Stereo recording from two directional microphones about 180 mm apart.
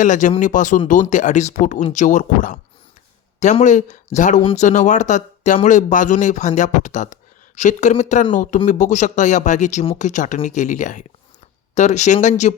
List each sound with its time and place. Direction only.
0.0 s speech: 45° left (ahead or behind)